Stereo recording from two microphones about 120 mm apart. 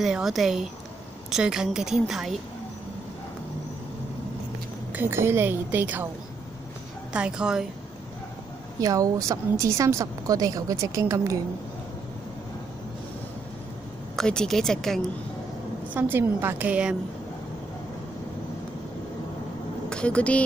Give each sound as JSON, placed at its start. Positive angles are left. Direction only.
{"t": 0.0, "sound": "a woman's voice", "side_deg": -5}
{"t": 4.9, "sound": "a woman's voice", "side_deg": -20}
{"t": 7.1, "sound": "a woman's voice", "side_deg": -10}
{"t": 8.7, "sound": "a woman's voice", "side_deg": -30}
{"t": 14.1, "sound": "a woman's voice", "side_deg": 5}
{"t": 15.9, "sound": "a woman's voice", "side_deg": -15}
{"t": 19.9, "sound": "speech", "side_deg": 10}